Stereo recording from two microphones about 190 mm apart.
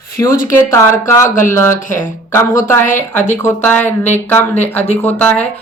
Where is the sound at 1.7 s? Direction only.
40° left (ahead or behind).